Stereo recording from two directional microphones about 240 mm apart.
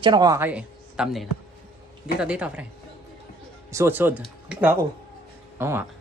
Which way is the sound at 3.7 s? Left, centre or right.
Centre.